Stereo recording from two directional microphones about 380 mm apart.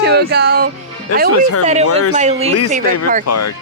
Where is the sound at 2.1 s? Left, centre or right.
Centre.